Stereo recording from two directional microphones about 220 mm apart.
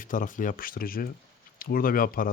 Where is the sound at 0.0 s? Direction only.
35° left (ahead or behind).